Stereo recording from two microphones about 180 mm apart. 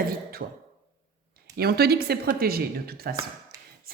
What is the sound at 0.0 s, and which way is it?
Beatboxing, 55° right (ahead or behind).